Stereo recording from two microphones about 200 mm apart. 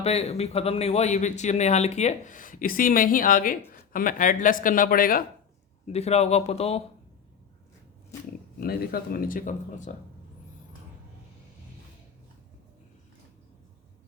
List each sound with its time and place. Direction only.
0.0 s speech: 30° left (ahead or behind)
5.8 s speech: 30° left (ahead or behind)
8.6 s speech: 50° left (ahead or behind)